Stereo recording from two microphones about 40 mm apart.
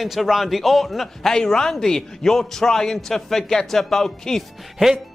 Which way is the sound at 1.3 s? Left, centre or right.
Centre.